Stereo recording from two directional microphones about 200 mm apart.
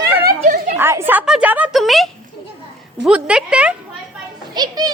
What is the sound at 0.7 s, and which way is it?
A woman's voice, 10° right (ahead or behind).